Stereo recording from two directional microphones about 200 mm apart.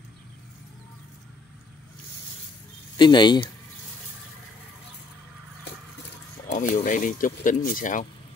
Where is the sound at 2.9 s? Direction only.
20° left (ahead or behind).